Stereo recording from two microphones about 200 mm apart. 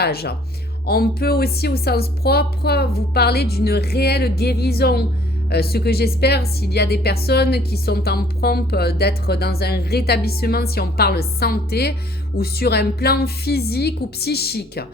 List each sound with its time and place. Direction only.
0.0 s speech: 50° left (ahead or behind)